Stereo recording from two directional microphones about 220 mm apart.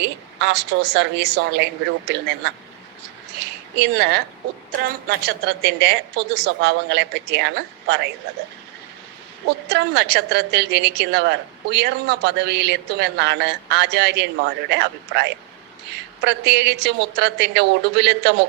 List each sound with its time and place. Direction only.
0.0 s a woman's voice: 50° right (ahead or behind)
3.8 s a woman's voice: 50° right (ahead or behind)
9.6 s a woman's voice: 50° right (ahead or behind)